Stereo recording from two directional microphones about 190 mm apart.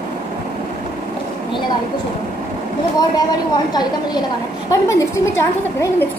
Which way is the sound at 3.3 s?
20° left (ahead or behind).